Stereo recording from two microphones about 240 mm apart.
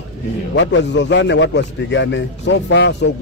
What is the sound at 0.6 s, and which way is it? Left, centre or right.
A man's voice, left.